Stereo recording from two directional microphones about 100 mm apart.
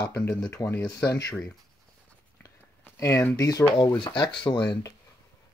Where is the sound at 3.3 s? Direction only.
40° left (ahead or behind).